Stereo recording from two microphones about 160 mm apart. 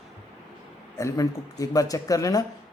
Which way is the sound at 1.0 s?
20° left (ahead or behind).